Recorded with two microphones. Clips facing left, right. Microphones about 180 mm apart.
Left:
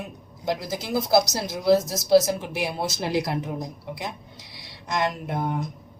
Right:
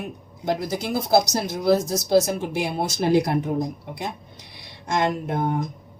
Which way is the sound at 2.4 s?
50° right (ahead or behind).